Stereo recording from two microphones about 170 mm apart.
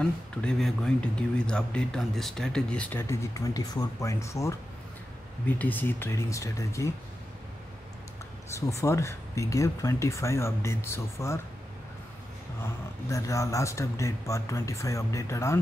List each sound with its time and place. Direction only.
0.0 s speech: 5° left (ahead or behind)
5.6 s speech: 10° left (ahead or behind)
8.5 s speech: 15° left (ahead or behind)
13.1 s speech: 20° left (ahead or behind)